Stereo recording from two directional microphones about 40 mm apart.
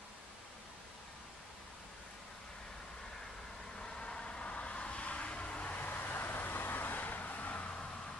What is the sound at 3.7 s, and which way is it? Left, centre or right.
Vehicle, left.